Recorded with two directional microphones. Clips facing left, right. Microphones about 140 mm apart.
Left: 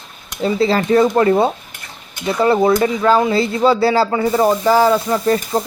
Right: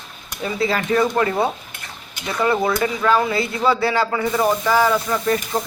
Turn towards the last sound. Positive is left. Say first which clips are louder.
# left 4 dB
turn(degrees=30)  # may be behind; listen again after turning